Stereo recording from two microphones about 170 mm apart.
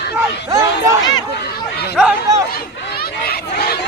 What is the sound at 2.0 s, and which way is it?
Speech, 5° right (ahead or behind).